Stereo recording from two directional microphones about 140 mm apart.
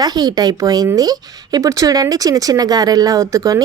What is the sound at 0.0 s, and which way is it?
A woman's voice, 30° right (ahead or behind).